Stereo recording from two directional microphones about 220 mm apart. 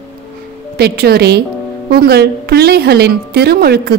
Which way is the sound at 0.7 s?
45° right (ahead or behind).